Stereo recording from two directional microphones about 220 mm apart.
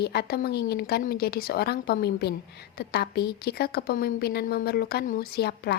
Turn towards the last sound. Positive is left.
turn(degrees=45)  # may be behind; listen again after turning